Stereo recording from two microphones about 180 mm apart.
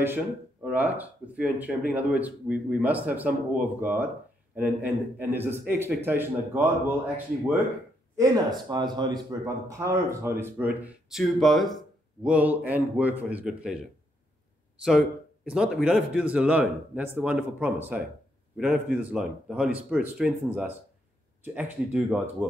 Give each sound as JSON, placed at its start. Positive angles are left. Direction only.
{"t": 0.0, "sound": "speech", "side_deg": -10}
{"t": 8.2, "sound": "speech", "side_deg": -25}